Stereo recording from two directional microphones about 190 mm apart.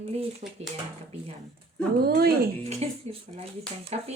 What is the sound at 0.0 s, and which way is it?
Speech, 30° right (ahead or behind).